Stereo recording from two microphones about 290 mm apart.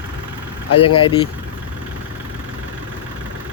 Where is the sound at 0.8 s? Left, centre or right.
Centre.